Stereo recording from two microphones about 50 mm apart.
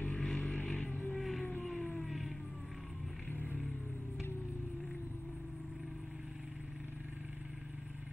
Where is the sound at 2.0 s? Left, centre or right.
Centre.